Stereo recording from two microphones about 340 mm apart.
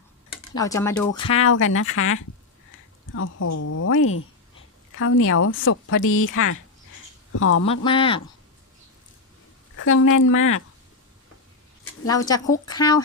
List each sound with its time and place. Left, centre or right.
0.5 s speech: centre
1.4 s a woman's voice: left
7.7 s speech: centre
9.7 s a woman's voice: left
12.0 s speech: centre